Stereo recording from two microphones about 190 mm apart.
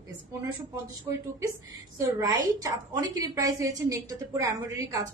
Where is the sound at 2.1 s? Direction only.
15° right (ahead or behind).